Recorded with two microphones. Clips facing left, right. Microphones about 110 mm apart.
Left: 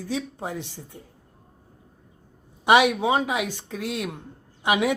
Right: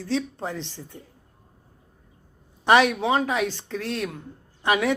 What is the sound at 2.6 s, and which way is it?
Speech, 15° left (ahead or behind).